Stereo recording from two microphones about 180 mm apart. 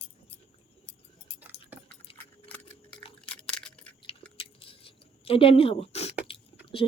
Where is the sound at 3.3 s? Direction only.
5° left (ahead or behind).